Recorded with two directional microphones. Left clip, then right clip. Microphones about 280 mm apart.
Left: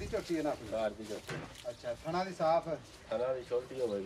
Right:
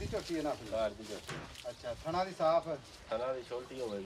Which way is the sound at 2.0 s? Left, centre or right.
Right.